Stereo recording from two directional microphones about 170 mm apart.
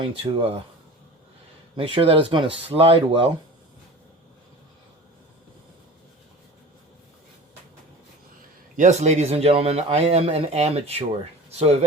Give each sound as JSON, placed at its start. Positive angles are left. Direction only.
{"t": 0.0, "sound": "speech", "side_deg": -35}
{"t": 1.7, "sound": "speech", "side_deg": -30}
{"t": 8.7, "sound": "speech", "side_deg": -45}